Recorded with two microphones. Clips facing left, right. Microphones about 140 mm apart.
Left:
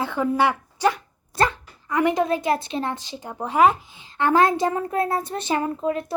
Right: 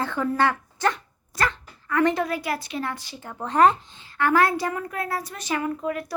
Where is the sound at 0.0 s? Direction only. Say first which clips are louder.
Left 2 dB; 15° left (ahead or behind).